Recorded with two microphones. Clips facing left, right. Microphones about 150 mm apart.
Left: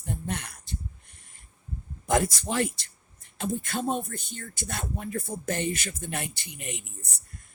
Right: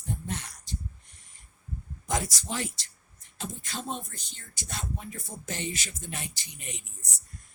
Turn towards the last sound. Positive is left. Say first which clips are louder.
# left 5 dB
turn(degrees=60)  # may be behind; listen again after turning